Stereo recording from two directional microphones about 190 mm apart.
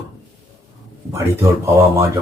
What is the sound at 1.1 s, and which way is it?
Speech, 15° right (ahead or behind).